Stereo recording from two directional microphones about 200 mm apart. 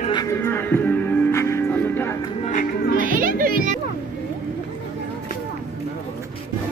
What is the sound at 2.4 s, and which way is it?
Music, 45° left (ahead or behind).